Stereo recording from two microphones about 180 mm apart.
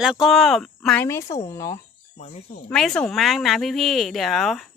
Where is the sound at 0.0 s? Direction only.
5° right (ahead or behind).